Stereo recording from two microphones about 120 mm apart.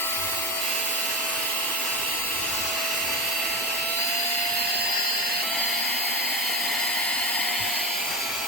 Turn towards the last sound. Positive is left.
turn(degrees=0)  # may be behind; listen again after turning